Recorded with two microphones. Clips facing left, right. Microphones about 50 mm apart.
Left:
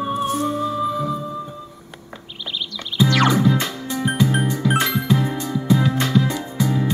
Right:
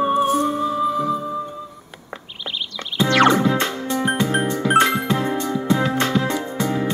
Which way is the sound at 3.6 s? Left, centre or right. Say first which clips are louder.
Right 3 dB; centre.